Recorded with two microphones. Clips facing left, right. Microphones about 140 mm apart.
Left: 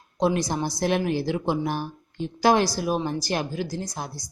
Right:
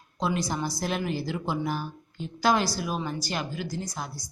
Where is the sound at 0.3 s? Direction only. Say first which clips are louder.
Left 4 dB; 40° left (ahead or behind).